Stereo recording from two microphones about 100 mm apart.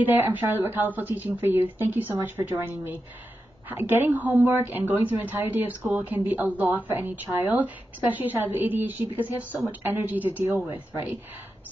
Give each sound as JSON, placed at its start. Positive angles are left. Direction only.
{"t": 0.0, "sound": "a woman's voice", "side_deg": -20}